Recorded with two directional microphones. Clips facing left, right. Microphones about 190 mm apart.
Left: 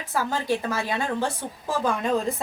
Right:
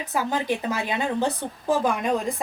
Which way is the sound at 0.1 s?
15° right (ahead or behind).